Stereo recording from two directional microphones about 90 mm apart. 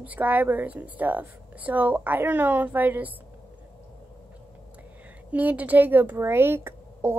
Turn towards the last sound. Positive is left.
turn(degrees=-25)  # may be behind; listen again after turning